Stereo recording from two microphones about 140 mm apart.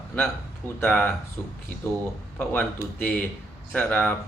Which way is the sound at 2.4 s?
10° left (ahead or behind).